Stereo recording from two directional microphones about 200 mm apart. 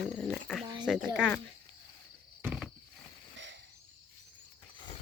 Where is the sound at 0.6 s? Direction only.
25° right (ahead or behind).